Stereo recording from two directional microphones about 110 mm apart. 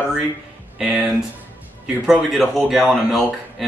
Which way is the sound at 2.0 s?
5° right (ahead or behind).